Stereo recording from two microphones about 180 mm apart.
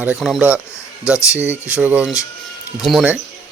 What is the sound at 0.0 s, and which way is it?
Speech, 5° right (ahead or behind).